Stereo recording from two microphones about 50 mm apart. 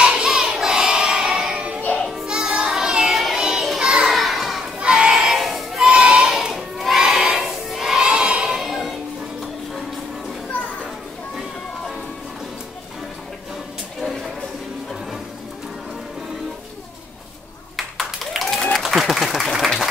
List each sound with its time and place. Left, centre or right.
0.0 s child singing: centre
0.3 s child singing: centre
2.2 s music: centre
3.4 s children playing: centre
4.9 s a sound: centre
5.2 s a sound: centre
5.9 s a sound: centre
17.7 s clapping: centre
18.8 s applause: centre